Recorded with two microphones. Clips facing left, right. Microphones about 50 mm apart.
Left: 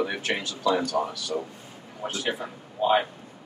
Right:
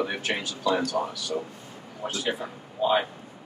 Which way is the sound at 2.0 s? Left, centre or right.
Centre.